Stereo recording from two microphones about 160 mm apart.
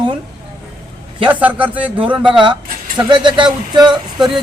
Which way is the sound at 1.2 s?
10° right (ahead or behind).